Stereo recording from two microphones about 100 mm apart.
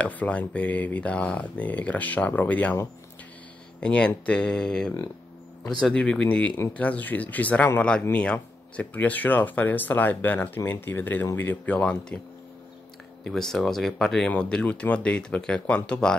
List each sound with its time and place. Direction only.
0.0 s speech: 15° left (ahead or behind)
3.8 s speech: 10° left (ahead or behind)
13.2 s speech: 5° left (ahead or behind)